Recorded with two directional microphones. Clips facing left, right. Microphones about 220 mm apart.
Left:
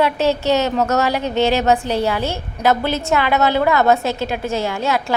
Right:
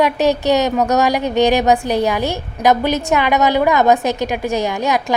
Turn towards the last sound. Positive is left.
turn(degrees=-15)  # may be behind; listen again after turning